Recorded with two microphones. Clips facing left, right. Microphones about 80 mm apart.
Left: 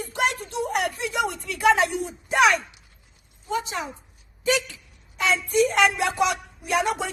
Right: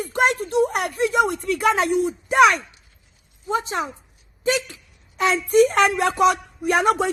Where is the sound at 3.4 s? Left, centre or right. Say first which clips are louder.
Right 4 dB; right.